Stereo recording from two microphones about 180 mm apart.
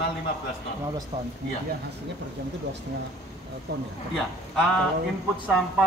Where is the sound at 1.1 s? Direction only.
35° right (ahead or behind).